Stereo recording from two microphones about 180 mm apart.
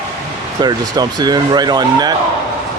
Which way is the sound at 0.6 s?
20° right (ahead or behind).